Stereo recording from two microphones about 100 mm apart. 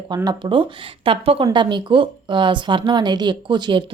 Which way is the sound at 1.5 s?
50° right (ahead or behind).